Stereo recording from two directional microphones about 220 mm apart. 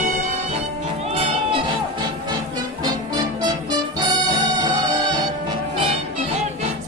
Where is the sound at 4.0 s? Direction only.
20° right (ahead or behind).